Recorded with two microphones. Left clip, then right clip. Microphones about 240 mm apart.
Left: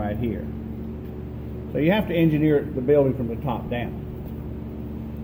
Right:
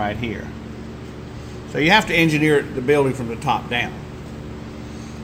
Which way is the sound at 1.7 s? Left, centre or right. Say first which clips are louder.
Right 6 dB; right.